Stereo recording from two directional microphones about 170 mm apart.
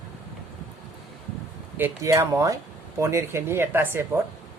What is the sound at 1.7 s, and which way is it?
Speech, 15° right (ahead or behind).